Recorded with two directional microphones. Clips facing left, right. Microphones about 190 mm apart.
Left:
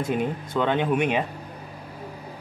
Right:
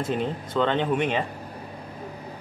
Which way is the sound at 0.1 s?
10° left (ahead or behind).